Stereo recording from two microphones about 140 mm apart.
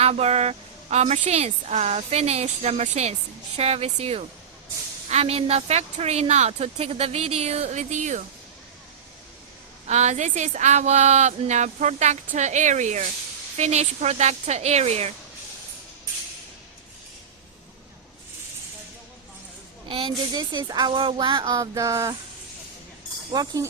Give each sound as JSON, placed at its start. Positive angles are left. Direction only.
{"t": 0.0, "sound": "a woman's voice", "side_deg": -50}
{"t": 9.8, "sound": "a woman's voice", "side_deg": -55}
{"t": 19.9, "sound": "speech", "side_deg": -35}
{"t": 23.3, "sound": "speech", "side_deg": -30}